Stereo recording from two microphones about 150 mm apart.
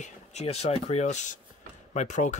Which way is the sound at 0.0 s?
50° left (ahead or behind).